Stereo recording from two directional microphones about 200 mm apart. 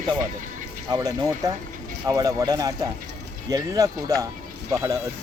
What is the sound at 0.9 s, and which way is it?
Speech, 15° right (ahead or behind).